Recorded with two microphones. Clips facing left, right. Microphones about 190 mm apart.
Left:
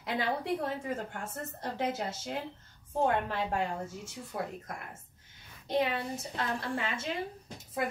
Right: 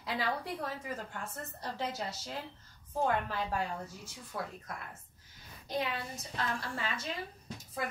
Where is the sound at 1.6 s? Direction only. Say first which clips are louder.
Left 5 dB; 50° left (ahead or behind).